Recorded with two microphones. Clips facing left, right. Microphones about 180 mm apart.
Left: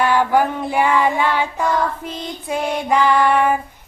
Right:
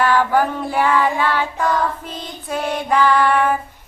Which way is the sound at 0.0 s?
15° left (ahead or behind).